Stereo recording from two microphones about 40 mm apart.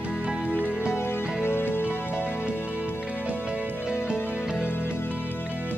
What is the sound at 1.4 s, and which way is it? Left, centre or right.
Music, left.